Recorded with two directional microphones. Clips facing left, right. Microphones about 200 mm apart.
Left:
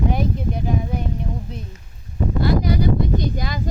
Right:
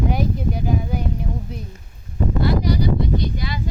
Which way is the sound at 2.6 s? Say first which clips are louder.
Left 1 dB; 55° left (ahead or behind).